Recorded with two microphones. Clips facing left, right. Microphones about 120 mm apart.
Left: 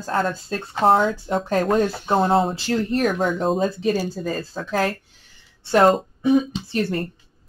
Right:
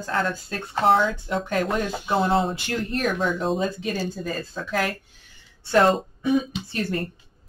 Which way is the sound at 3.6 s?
35° left (ahead or behind).